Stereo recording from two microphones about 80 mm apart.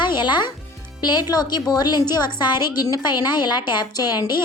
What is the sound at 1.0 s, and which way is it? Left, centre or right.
A woman's voice, left.